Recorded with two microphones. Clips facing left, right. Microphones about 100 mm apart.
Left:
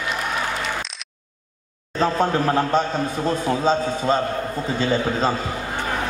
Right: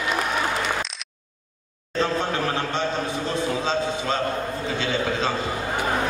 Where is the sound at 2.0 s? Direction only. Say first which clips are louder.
Left 4 dB; 45° left (ahead or behind).